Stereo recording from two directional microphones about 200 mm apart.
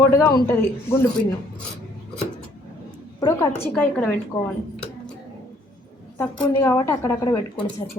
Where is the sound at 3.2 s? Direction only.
20° left (ahead or behind).